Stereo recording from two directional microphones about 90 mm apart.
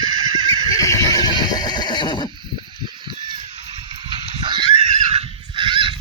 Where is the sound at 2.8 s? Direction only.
60° right (ahead or behind).